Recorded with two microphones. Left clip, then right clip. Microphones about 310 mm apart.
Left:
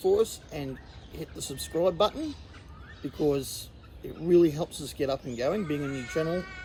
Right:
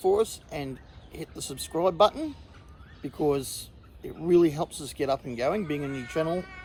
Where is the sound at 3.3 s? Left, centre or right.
Centre.